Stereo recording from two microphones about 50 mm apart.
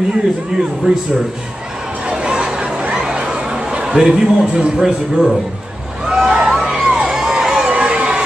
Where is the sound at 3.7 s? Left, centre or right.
Centre.